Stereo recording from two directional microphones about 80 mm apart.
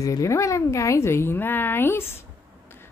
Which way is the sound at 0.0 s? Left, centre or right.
Left.